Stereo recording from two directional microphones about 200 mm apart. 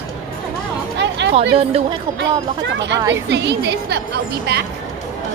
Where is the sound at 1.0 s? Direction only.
60° right (ahead or behind).